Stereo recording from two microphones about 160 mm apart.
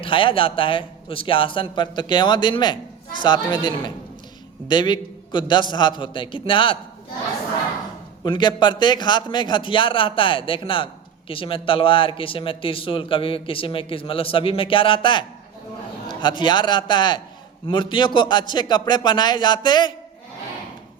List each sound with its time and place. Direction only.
0.0 s a man's voice: 35° left (ahead or behind)
8.2 s a man's voice: 30° left (ahead or behind)